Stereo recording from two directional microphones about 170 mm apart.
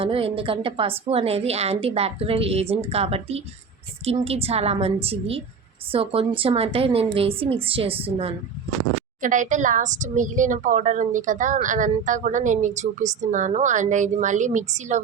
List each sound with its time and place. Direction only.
0.0 s a woman's voice: 35° right (ahead or behind)
9.2 s a woman's voice: 50° right (ahead or behind)